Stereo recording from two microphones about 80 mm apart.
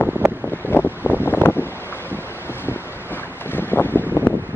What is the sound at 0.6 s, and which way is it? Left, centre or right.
Wind noise, left.